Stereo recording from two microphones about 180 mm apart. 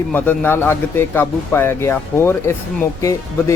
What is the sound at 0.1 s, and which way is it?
Speech, 10° left (ahead or behind).